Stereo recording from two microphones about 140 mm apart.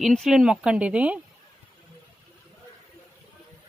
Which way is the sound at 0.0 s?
Centre (ahead or behind).